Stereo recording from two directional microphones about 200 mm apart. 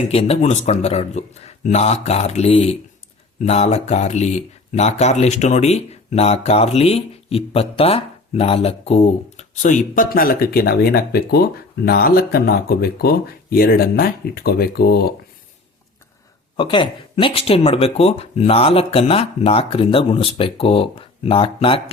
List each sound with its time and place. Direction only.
0.1 s speech: 30° left (ahead or behind); by 15.1 s 50° left (ahead or behind)
16.6 s speech: 25° left (ahead or behind)